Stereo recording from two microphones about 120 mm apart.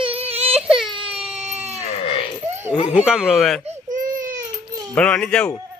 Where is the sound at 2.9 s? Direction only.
5° right (ahead or behind).